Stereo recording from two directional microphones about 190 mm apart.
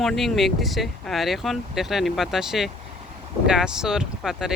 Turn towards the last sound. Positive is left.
turn(degrees=0)  # may be behind; listen again after turning